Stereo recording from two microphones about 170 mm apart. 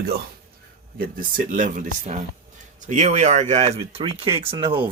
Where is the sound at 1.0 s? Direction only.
55° right (ahead or behind).